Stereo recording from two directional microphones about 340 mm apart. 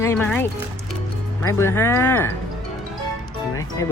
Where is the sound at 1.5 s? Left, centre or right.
Centre.